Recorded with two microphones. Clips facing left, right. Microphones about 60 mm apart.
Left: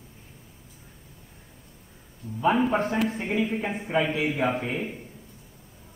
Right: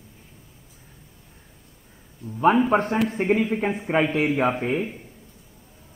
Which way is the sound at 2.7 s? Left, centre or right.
Right.